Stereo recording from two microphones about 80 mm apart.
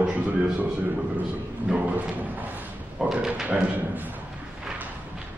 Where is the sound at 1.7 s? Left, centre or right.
Centre.